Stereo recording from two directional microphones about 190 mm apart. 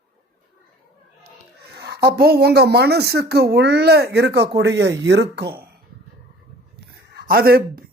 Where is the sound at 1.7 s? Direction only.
60° right (ahead or behind).